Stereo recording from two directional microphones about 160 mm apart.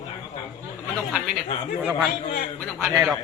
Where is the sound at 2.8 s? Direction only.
20° right (ahead or behind).